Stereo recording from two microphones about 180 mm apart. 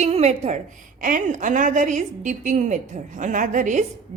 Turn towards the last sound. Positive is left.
turn(degrees=-45)  # may be behind; listen again after turning